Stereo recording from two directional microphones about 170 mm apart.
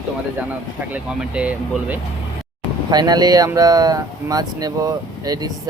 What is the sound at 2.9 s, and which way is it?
Speech, 25° right (ahead or behind).